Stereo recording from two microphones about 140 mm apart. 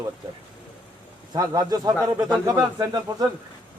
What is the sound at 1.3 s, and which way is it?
A man's voice, 30° right (ahead or behind).